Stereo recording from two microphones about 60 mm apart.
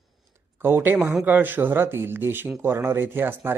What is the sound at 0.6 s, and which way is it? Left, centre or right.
Speech, right.